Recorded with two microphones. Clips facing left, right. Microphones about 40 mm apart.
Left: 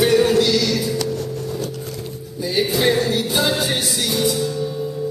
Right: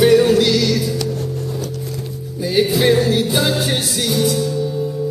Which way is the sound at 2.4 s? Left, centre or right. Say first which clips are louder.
Right 4 dB; centre.